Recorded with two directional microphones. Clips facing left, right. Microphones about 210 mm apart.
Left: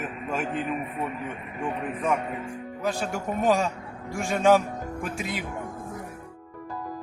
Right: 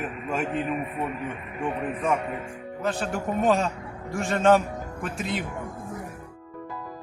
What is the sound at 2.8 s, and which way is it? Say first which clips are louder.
Speech: right 1 dB; centre (ahead or behind).